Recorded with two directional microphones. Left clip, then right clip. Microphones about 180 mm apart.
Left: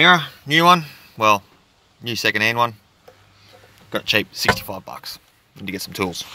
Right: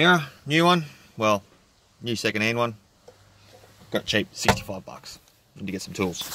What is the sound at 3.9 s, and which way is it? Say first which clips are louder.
Speech: left 5 dB; centre (ahead or behind).